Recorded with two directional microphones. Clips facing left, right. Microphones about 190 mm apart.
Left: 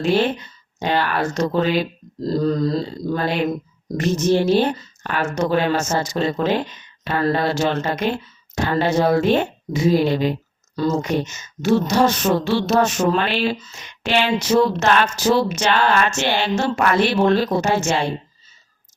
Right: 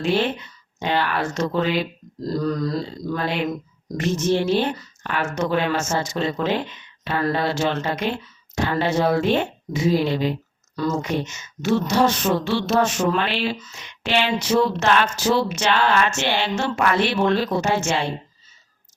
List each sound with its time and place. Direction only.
0.0 s speech: 40° left (ahead or behind)
2.2 s grunt: 25° left (ahead or behind)
3.9 s speech: 40° left (ahead or behind)
10.8 s speech: 35° left (ahead or behind)